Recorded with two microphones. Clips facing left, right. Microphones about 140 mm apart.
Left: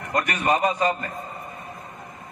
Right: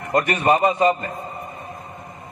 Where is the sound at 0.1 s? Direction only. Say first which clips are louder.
Right 5 dB; 30° right (ahead or behind).